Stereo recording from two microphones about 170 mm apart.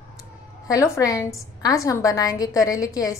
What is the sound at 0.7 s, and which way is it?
A woman's voice, 20° left (ahead or behind).